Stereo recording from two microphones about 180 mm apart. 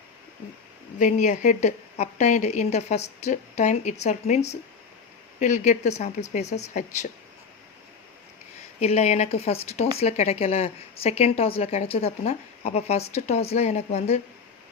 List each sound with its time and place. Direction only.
0.9 s a woman's voice: 45° left (ahead or behind)
8.8 s a woman's voice: 35° left (ahead or behind)